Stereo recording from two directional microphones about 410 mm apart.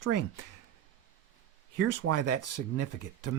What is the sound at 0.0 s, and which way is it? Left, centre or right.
Speech, right.